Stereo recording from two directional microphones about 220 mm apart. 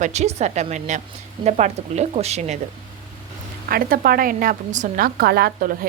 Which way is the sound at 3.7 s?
40° right (ahead or behind).